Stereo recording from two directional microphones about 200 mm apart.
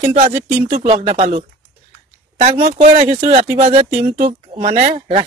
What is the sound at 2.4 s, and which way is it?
Speech, 35° right (ahead or behind).